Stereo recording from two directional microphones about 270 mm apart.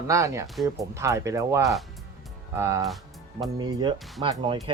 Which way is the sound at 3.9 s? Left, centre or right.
Centre.